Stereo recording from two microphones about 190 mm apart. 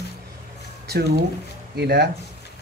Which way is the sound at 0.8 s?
55° right (ahead or behind).